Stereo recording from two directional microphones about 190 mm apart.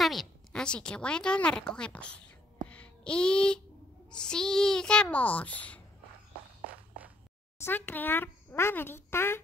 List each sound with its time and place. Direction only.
0.0 s a woman's voice: centre (ahead or behind)
2.7 s music: 5° left (ahead or behind)
4.1 s a child's voice: 5° left (ahead or behind)
7.6 s speech: 10° left (ahead or behind)